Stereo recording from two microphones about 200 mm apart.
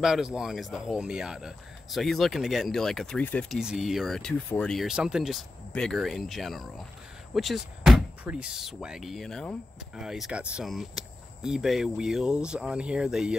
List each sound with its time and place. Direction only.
0.0 s speech: 5° right (ahead or behind)